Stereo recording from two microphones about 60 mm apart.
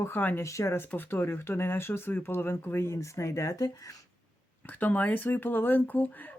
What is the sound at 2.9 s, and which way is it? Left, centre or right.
Speech, left.